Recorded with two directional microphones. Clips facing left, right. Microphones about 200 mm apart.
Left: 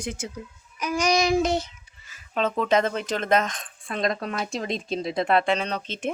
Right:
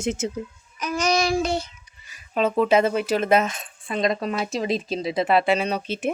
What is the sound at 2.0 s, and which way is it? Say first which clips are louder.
Speech: right 3 dB; 10° right (ahead or behind).